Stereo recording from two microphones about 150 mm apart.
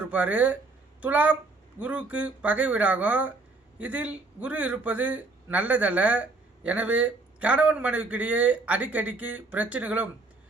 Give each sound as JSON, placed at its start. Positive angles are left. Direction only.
{"t": 0.0, "sound": "a man's voice", "side_deg": -10}